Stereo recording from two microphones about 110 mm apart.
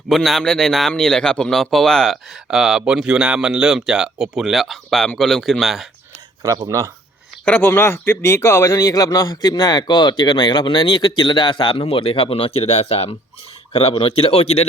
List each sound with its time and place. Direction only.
0.1 s speech: centre (ahead or behind)
6.7 s speech: 30° right (ahead or behind)
7.4 s speech: 10° left (ahead or behind); by 14.7 s 60° left (ahead or behind)